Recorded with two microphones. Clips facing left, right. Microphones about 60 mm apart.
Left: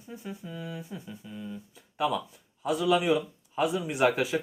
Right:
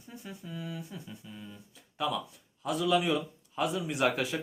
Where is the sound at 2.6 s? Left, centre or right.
Centre.